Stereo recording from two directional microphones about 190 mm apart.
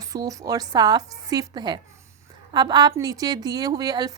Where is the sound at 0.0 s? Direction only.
20° right (ahead or behind).